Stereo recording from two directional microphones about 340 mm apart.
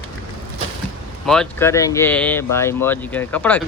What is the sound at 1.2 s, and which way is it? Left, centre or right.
Speech, centre.